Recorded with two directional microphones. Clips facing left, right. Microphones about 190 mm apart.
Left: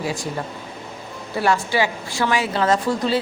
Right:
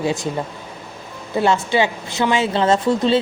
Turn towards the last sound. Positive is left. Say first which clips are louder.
# right 4 dB
turn(degrees=-25)  # may be behind; listen again after turning